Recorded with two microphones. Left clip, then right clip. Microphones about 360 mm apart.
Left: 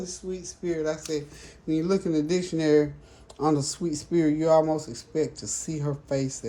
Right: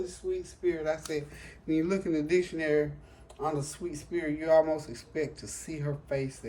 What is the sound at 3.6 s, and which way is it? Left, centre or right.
Speech, centre.